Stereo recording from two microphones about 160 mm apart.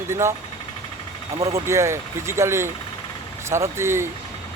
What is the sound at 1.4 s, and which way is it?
Speech, 20° right (ahead or behind).